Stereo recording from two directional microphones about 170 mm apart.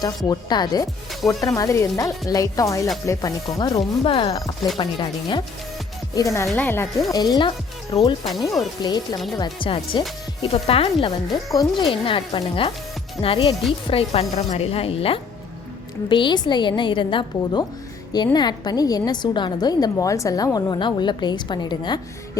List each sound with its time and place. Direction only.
0.3 s a woman's voice: 25° left (ahead or behind)
3.8 s a woman's voice: 35° left (ahead or behind)
6.1 s speech: 20° left (ahead or behind)
7.1 s a woman's voice: 25° left (ahead or behind)